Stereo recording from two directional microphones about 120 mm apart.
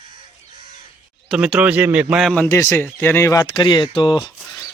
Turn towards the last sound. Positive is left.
turn(degrees=40)  # may be behind; listen again after turning